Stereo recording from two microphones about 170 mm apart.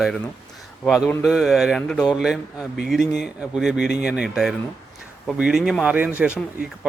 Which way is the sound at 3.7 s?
80° left.